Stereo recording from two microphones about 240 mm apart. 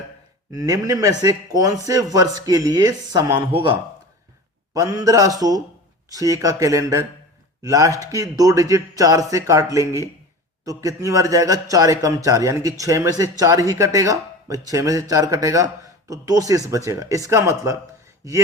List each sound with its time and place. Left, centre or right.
0.5 s a man's voice: centre